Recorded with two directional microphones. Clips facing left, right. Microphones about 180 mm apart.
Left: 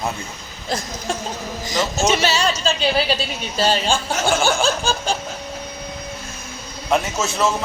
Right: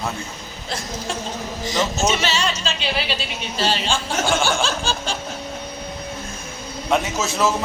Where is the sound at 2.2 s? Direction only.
40° left (ahead or behind).